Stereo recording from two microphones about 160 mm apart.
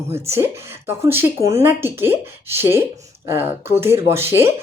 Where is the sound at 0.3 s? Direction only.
15° right (ahead or behind).